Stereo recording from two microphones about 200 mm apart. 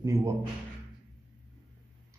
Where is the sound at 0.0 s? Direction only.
15° right (ahead or behind).